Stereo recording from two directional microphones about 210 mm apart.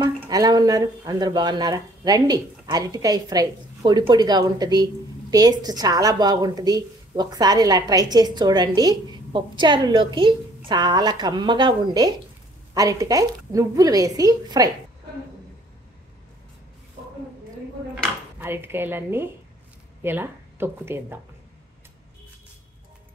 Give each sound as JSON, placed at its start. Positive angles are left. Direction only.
{"t": 0.0, "sound": "a woman's voice", "side_deg": -20}
{"t": 18.4, "sound": "a woman's voice", "side_deg": -10}